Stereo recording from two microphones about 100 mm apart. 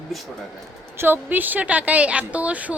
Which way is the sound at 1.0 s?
20° right (ahead or behind).